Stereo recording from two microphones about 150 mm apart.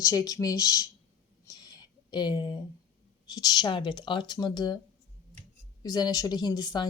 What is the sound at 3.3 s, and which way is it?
Speech, 25° left (ahead or behind).